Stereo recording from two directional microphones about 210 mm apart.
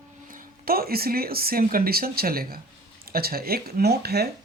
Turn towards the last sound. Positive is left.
turn(degrees=-50)  # may be behind; listen again after turning